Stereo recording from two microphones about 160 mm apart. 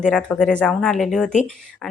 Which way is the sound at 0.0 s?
5° left (ahead or behind).